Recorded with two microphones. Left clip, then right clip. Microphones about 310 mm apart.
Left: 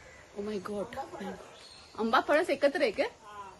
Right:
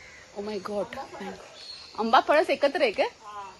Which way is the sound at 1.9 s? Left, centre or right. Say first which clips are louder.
Right 6 dB; centre.